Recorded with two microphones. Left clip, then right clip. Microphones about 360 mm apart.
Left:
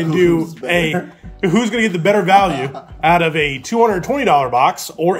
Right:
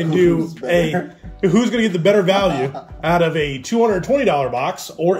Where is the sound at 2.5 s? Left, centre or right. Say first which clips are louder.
Right 1 dB; left.